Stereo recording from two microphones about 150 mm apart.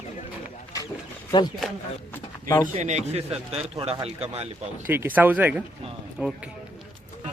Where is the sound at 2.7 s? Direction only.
50° right (ahead or behind).